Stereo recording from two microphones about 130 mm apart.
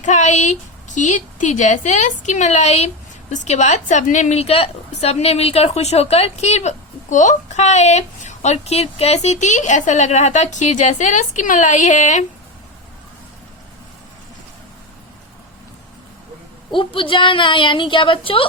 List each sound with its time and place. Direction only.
0.0 s a woman's voice: 65° left (ahead or behind)
16.7 s a woman's voice: 40° left (ahead or behind)